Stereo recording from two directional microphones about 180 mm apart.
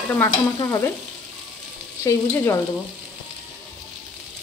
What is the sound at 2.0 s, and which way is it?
Stir, 15° left (ahead or behind).